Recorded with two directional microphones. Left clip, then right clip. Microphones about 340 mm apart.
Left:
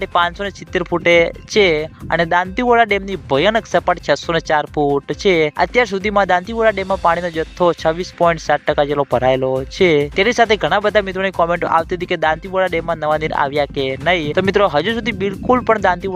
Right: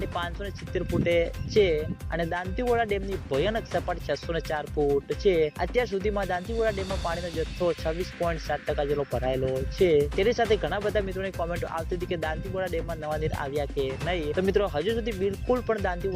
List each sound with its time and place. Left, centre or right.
0.0 s speech: left